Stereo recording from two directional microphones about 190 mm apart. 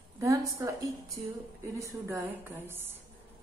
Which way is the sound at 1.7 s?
15° right (ahead or behind).